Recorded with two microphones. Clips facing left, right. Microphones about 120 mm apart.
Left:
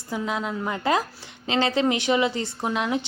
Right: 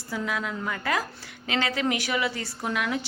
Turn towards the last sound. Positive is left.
turn(degrees=20)  # may be behind; listen again after turning